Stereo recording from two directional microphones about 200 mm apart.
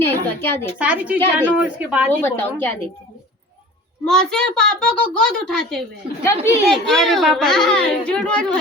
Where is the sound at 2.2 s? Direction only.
10° left (ahead or behind).